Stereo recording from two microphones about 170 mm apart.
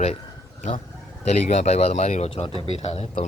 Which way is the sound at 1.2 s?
45° left (ahead or behind).